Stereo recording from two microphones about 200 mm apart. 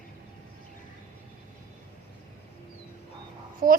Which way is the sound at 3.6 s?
45° right (ahead or behind).